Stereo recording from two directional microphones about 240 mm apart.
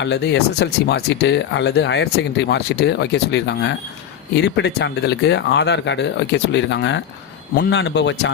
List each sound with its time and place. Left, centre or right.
0.0 s speech: left